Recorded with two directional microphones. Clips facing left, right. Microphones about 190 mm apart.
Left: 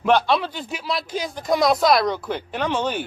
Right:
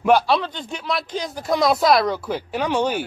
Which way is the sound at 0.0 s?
5° right (ahead or behind).